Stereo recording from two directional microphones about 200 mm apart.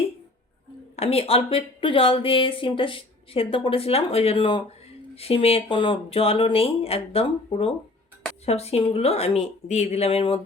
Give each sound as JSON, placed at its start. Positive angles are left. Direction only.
{"t": 0.9, "sound": "speech", "side_deg": 30}